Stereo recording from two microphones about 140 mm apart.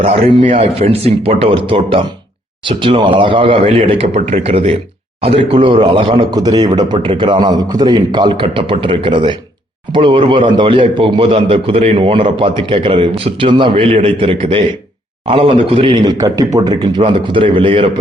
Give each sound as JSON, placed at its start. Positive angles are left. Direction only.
{"t": 0.0, "sound": "a man's voice", "side_deg": -45}
{"t": 16.1, "sound": "speech", "side_deg": -25}